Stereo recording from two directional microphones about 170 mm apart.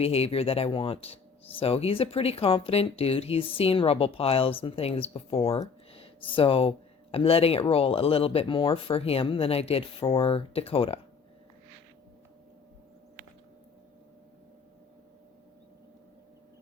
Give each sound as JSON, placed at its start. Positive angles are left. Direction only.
{"t": 0.0, "sound": "speech", "side_deg": 35}